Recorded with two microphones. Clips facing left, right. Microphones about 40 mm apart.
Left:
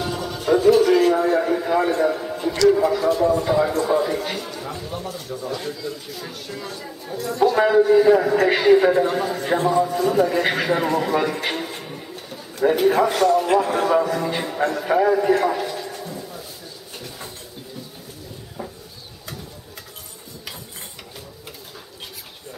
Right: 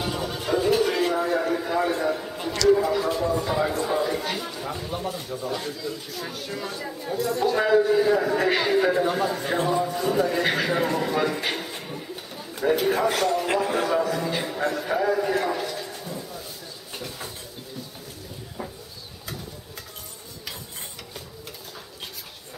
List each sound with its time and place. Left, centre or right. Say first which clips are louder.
0.0 s music: left 3 dB; centre
1.1 s a man's voice: left 5 dB; centre
4.6 s speech: even; centre
5.6 s speech: left 2 dB; centre
7.4 s a man's voice: left 5 dB; centre
13.1 s a sound: left 6 dB; centre
13.6 s a man's voice: left 5 dB; centre
15.1 s a sound: left 6 dB; centre
18.6 s a sound: left 2 dB; centre